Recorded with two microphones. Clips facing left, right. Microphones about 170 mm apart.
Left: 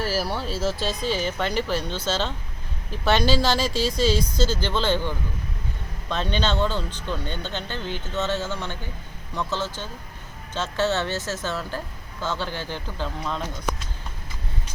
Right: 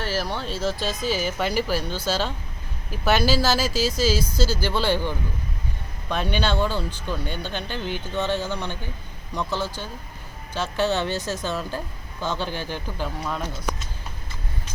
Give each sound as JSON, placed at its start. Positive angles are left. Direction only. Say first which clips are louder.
{"t": 0.0, "sound": "speech", "louder": "left 1 dB", "side_deg": 5}